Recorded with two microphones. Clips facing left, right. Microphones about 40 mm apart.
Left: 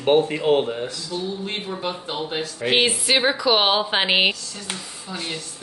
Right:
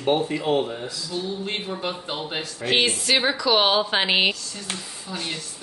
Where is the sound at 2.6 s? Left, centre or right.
Centre.